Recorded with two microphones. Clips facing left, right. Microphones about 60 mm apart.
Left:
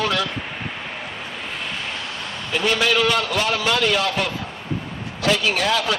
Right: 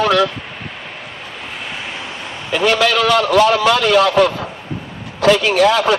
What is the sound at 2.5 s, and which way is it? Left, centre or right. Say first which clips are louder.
A man's voice: right 5 dB; right.